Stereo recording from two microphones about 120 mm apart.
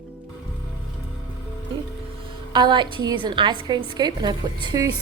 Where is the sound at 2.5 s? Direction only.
40° right (ahead or behind).